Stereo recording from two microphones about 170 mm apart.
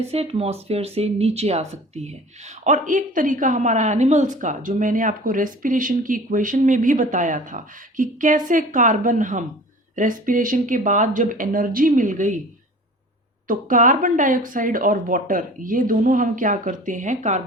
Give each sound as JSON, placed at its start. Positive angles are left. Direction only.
{"t": 0.0, "sound": "speech", "side_deg": -35}
{"t": 13.5, "sound": "speech", "side_deg": -50}